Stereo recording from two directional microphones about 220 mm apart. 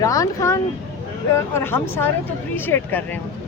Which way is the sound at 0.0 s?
15° left (ahead or behind).